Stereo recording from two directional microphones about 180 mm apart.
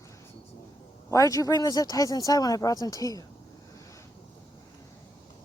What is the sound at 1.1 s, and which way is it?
Speech, 20° left (ahead or behind).